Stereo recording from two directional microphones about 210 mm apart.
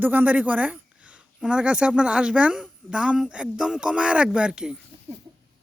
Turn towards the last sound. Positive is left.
turn(degrees=-5)  # may be behind; listen again after turning